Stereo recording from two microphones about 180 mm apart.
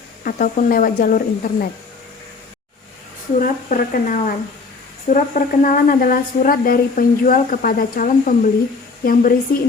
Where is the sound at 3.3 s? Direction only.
50° left (ahead or behind).